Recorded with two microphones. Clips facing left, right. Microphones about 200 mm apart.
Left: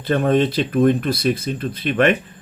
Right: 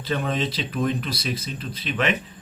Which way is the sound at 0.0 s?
55° left (ahead or behind).